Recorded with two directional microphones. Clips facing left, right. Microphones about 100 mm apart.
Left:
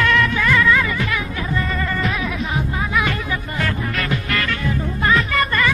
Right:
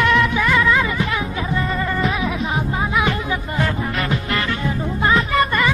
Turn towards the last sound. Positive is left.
turn(degrees=-25)  # may be behind; listen again after turning